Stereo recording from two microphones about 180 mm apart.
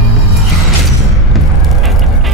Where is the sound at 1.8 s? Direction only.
Centre (ahead or behind).